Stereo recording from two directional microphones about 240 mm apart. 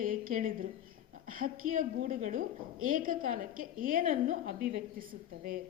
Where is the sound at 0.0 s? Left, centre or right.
Right.